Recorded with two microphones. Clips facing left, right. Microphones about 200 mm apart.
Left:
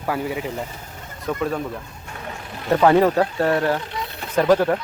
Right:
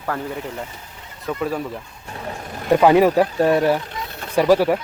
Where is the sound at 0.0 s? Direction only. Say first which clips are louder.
Left 2 dB; 10° left (ahead or behind).